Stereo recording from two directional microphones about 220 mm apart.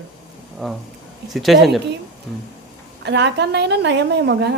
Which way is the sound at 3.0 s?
50° right (ahead or behind).